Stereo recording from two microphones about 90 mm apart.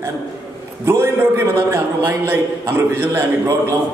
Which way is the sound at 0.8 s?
25° right (ahead or behind).